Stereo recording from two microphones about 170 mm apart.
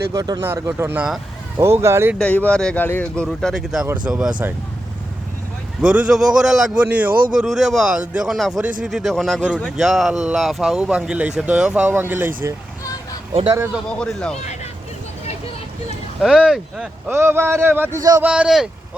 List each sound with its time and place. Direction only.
0.1 s speech: 20° right (ahead or behind)
2.1 s speech: 10° left (ahead or behind); by 4.5 s 5° right (ahead or behind)
5.8 s speech: 5° right (ahead or behind)
13.7 s speech: 5° left (ahead or behind)
16.2 s speech: 5° right (ahead or behind); by 18.2 s 20° right (ahead or behind)
18.2 s speech: 5° right (ahead or behind)